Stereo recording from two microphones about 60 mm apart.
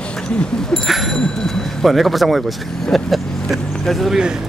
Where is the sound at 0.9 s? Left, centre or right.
Centre.